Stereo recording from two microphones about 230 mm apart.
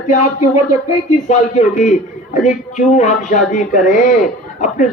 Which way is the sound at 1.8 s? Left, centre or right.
Left.